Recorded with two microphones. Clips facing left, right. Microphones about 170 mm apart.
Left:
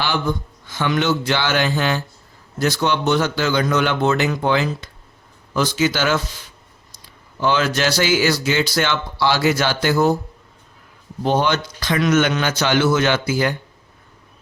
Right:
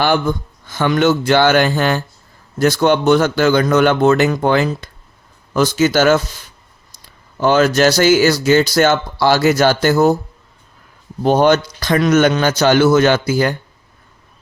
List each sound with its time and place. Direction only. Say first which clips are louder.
0.0 s speech: right 6 dB; 50° right (ahead or behind)
7.3 s speech: right 6 dB; 45° right (ahead or behind)
11.2 s a man's voice: right 6 dB; 45° right (ahead or behind)